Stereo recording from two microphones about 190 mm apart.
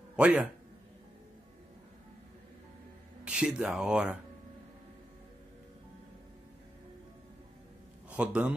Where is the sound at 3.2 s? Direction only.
5° right (ahead or behind).